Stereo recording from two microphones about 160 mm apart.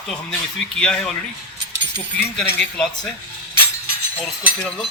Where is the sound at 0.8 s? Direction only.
5° left (ahead or behind).